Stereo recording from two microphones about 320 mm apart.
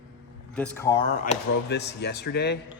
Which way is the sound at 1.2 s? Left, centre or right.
Left.